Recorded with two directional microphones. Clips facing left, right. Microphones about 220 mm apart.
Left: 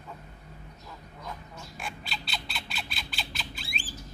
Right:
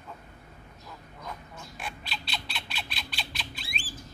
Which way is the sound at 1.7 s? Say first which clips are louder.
Even; centre (ahead or behind).